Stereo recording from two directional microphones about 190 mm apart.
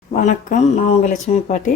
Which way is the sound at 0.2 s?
40° left (ahead or behind).